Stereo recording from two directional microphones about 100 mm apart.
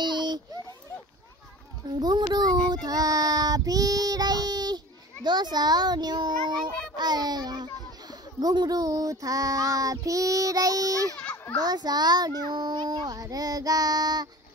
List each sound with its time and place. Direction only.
0.0 s a sound: 45° right (ahead or behind)
2.0 s a child's voice: 45° right (ahead or behind)
2.7 s child singing: 40° right (ahead or behind)
7.0 s a child's voice: 45° right (ahead or behind)
11.1 s children playing: 15° left (ahead or behind)
11.6 s a child's voice: 40° right (ahead or behind)